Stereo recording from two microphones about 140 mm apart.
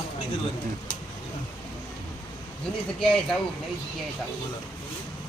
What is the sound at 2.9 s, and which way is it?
Speech, 5° left (ahead or behind).